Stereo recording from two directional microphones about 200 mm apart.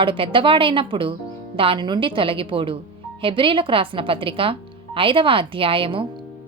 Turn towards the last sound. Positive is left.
turn(degrees=-25)  # may be behind; listen again after turning